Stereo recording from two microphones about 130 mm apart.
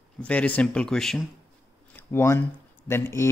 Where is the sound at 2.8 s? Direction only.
20° left (ahead or behind).